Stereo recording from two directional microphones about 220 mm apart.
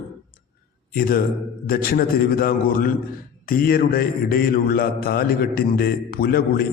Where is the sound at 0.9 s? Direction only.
40° left (ahead or behind).